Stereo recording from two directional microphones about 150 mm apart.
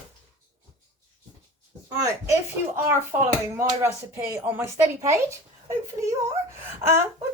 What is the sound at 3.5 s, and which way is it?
Speech, 15° right (ahead or behind).